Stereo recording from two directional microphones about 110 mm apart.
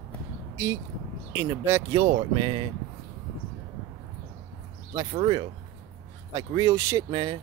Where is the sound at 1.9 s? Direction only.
45° right (ahead or behind).